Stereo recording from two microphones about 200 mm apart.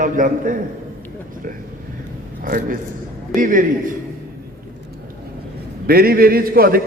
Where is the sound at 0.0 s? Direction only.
40° right (ahead or behind).